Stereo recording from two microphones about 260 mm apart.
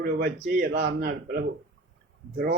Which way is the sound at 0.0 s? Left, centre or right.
Right.